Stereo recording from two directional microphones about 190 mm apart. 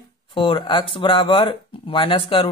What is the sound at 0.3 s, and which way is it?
Speech, 25° left (ahead or behind).